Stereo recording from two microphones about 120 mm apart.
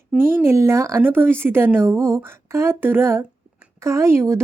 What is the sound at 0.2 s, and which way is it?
Speech, 20° right (ahead or behind).